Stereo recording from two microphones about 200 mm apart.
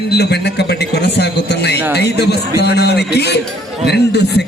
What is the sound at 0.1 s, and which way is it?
A man's voice, 55° left (ahead or behind).